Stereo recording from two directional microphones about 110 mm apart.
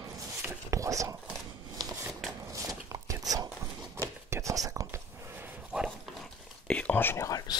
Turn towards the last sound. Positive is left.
turn(degrees=35)  # may be behind; listen again after turning